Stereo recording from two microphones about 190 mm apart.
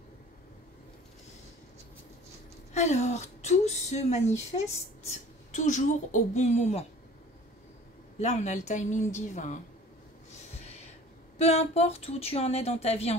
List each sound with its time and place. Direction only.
2.7 s speech: 35° left (ahead or behind)
8.2 s speech: 35° left (ahead or behind)
11.3 s speech: 35° left (ahead or behind)